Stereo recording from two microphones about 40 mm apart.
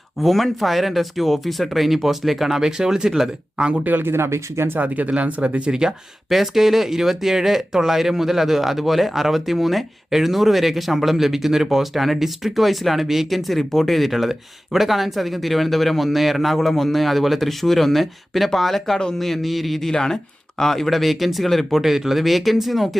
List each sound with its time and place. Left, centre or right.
0.2 s speech: centre
4.0 s speech: right
4.8 s speech: right
6.2 s speech: centre
21.8 s speech: centre